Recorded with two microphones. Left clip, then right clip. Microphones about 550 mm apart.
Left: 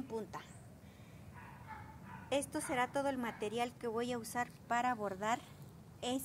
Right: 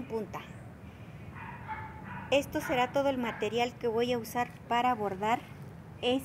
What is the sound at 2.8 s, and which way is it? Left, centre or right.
Speech, left.